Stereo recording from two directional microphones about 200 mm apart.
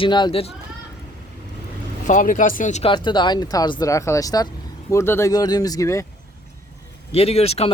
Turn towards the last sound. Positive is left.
turn(degrees=30)  # may be behind; listen again after turning